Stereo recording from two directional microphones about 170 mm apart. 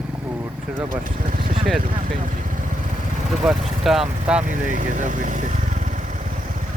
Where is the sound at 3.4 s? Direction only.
Centre (ahead or behind).